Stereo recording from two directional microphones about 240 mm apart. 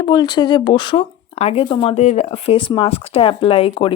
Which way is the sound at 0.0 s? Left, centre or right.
Centre.